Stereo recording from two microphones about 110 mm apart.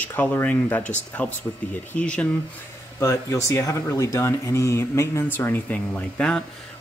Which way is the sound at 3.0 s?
25° left (ahead or behind).